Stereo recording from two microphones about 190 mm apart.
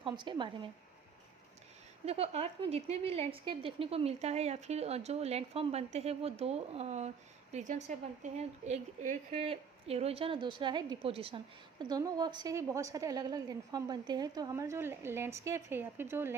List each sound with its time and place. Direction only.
0.0 s a woman's voice: 25° right (ahead or behind)
2.0 s a woman's voice: 30° right (ahead or behind); by 16.3 s 10° right (ahead or behind)